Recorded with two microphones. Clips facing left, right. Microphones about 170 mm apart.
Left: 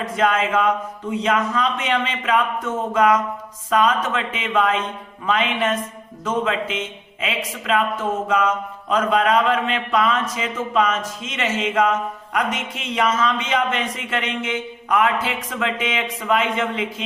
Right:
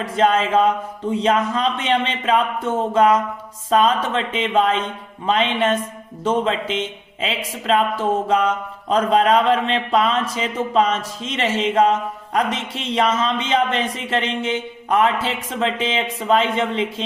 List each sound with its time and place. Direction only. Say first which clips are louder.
0.0 s a man's voice: right 2 dB; 30° right (ahead or behind)